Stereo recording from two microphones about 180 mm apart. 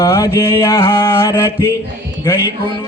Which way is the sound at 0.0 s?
20° left (ahead or behind).